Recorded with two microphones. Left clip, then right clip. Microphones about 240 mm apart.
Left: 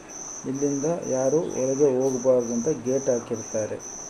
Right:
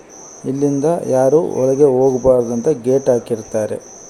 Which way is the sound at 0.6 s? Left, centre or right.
Right.